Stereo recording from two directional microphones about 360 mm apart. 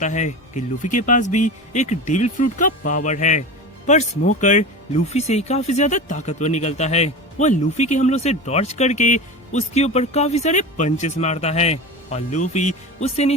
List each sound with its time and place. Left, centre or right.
0.0 s speech: centre